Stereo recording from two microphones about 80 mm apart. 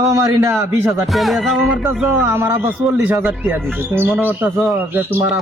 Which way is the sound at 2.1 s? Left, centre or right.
Right.